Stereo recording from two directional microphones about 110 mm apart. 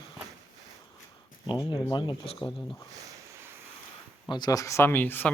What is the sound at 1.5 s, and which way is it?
Speech, 45° left (ahead or behind).